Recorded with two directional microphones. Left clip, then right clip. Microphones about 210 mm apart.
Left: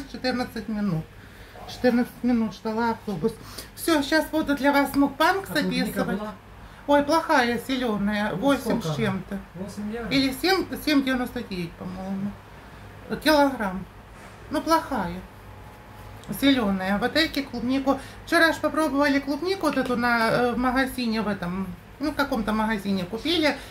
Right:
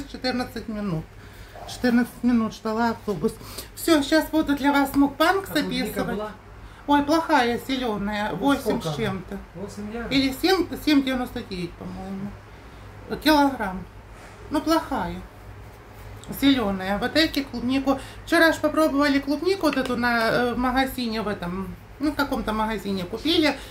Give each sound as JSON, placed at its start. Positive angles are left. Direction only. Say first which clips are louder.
{"t": 0.1, "sound": "a woman's voice", "louder": "even", "side_deg": -5}
{"t": 1.8, "sound": "speech", "louder": "left 1 dB", "side_deg": -35}
{"t": 3.8, "sound": "a woman's voice", "louder": "right 2 dB", "side_deg": -5}
{"t": 13.1, "sound": "a woman's voice", "louder": "even", "side_deg": 0}
{"t": 16.3, "sound": "a woman's voice", "louder": "right 1 dB", "side_deg": -5}